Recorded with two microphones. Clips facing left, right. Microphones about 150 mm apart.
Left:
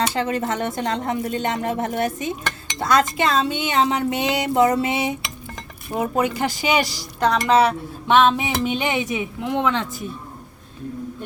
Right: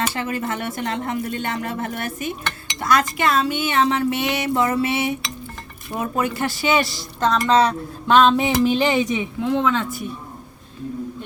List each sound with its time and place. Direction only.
0.1 s speech: 25° left (ahead or behind)
7.2 s a sound: 15° left (ahead or behind)
9.5 s speech: 15° left (ahead or behind)